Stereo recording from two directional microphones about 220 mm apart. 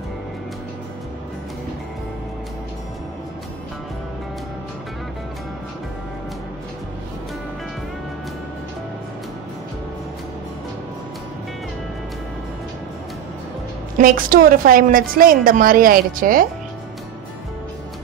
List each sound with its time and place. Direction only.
13.9 s a woman's voice: 40° right (ahead or behind)